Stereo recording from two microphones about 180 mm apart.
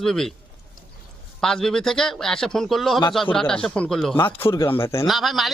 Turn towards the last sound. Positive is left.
turn(degrees=0)  # may be behind; listen again after turning